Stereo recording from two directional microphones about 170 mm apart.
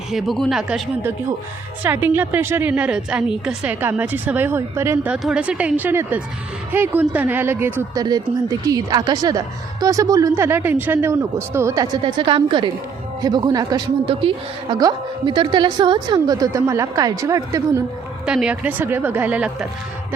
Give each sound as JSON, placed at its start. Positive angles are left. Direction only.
{"t": 0.1, "sound": "speech", "side_deg": 0}
{"t": 1.8, "sound": "a woman's voice", "side_deg": -10}
{"t": 18.3, "sound": "a woman's voice", "side_deg": -5}